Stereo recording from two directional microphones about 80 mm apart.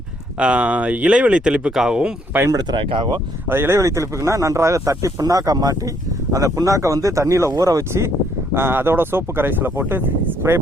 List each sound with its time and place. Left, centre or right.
0.3 s speech: centre
2.5 s speech: right
3.5 s speech: right
3.8 s speech: right